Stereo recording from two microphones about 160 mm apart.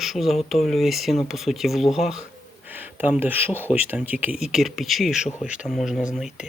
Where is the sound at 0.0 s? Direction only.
Centre (ahead or behind).